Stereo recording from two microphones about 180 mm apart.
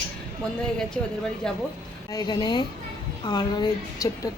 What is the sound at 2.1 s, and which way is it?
A woman's voice, 20° left (ahead or behind).